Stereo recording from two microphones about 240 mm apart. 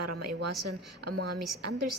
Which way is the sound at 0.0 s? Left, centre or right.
Right.